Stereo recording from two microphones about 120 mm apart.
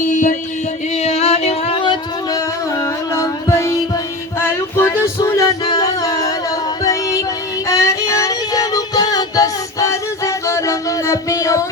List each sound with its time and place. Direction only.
0.0 s music: 90° left
1.0 s a sound: 60° left (ahead or behind)
1.8 s a sound: 40° left (ahead or behind)
3.2 s music: 25° left (ahead or behind)
4.8 s music: 25° left (ahead or behind)
7.7 s music: 25° left (ahead or behind)